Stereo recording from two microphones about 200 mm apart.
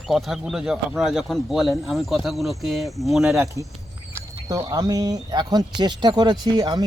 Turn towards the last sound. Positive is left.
turn(degrees=-20)  # may be behind; listen again after turning